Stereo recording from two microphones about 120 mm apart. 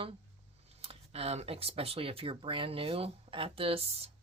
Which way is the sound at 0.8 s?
55° right (ahead or behind).